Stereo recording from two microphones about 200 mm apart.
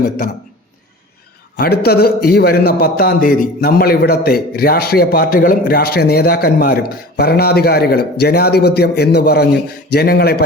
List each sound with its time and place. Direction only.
1.5 s a man's voice: 50° left (ahead or behind)